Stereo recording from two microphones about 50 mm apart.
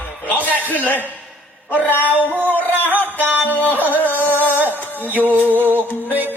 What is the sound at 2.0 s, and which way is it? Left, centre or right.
Music, right.